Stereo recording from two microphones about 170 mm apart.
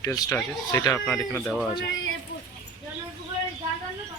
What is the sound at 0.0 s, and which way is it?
Speech, 20° left (ahead or behind).